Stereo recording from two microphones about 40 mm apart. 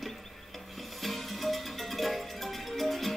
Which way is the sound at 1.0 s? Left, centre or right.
Centre.